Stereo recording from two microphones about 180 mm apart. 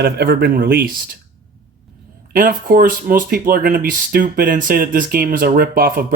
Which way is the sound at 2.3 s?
50° right (ahead or behind).